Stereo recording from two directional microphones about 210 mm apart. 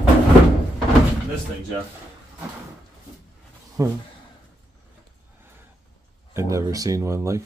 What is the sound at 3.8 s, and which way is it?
Speech, 15° right (ahead or behind).